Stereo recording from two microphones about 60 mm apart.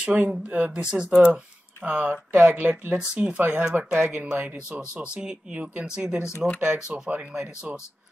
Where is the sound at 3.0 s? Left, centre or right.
Centre.